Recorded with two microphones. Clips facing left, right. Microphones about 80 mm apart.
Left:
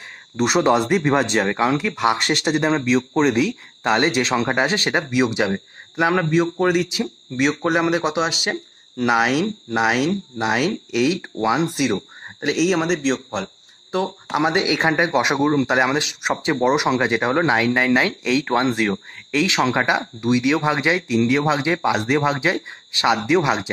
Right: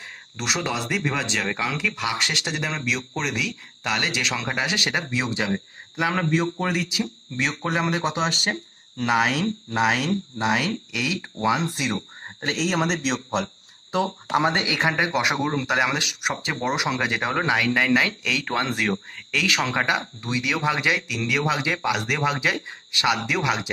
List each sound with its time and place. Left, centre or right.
0.4 s speech: left
5.1 s speech: centre
14.5 s speech: left